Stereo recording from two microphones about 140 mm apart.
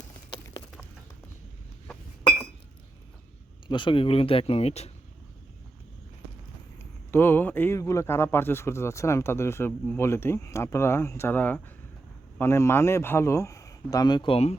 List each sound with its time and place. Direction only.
3.7 s speech: 35° left (ahead or behind)
7.1 s a man's voice: 15° left (ahead or behind); by 14.5 s 40° left (ahead or behind)